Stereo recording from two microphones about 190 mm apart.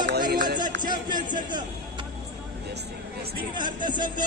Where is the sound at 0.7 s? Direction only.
25° right (ahead or behind).